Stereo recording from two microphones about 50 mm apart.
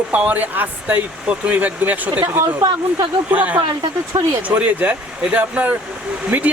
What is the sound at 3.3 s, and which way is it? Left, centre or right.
Speech, right.